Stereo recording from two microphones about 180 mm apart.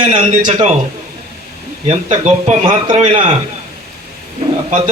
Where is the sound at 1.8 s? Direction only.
35° right (ahead or behind).